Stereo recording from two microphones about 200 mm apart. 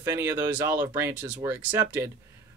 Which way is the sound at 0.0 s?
15° right (ahead or behind).